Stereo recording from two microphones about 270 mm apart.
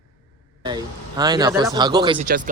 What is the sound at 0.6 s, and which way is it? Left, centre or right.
A man's voice, centre.